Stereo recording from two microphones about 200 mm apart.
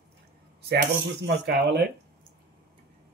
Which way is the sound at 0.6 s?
55° right (ahead or behind).